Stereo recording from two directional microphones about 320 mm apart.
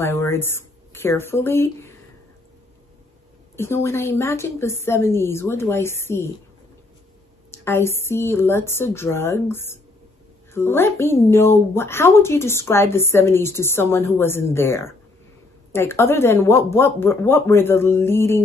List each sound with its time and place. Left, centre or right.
0.0 s speech: centre
3.5 s a woman's voice: centre
7.6 s a woman's voice: centre